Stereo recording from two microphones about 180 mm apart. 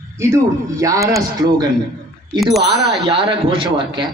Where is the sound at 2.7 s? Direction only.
25° right (ahead or behind).